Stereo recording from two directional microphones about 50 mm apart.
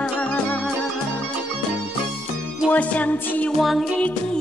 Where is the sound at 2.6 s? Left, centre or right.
Left.